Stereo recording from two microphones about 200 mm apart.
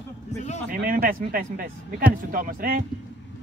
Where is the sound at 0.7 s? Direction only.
45° right (ahead or behind).